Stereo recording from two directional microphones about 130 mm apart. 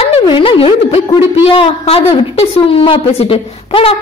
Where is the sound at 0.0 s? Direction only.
45° left (ahead or behind).